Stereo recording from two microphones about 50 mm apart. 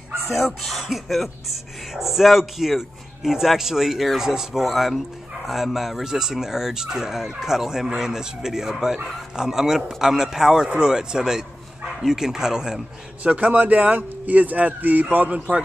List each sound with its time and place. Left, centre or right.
0.3 s a man's voice: centre
13.2 s speech: right